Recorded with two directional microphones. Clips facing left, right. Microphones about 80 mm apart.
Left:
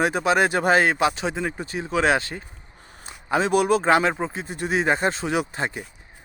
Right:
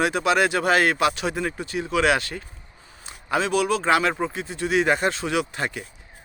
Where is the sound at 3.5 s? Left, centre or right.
Left.